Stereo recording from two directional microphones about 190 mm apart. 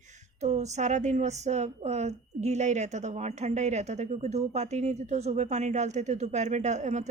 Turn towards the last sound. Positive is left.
turn(degrees=-40)  # may be behind; listen again after turning